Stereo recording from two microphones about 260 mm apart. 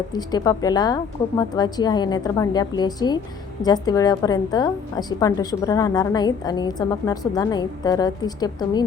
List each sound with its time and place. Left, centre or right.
0.1 s a woman's voice: centre